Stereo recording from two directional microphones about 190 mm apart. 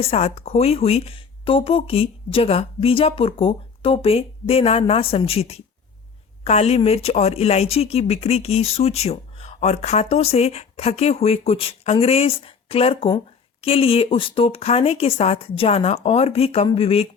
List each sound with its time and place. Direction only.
0.0 s speech: 30° left (ahead or behind)